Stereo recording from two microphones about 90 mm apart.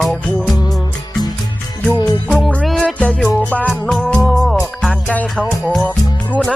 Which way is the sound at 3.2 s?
10° left (ahead or behind).